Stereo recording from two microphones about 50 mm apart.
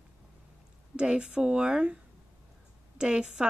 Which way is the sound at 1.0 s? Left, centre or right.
Right.